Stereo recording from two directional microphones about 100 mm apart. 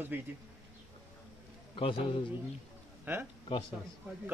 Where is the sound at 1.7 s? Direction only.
60° left (ahead or behind).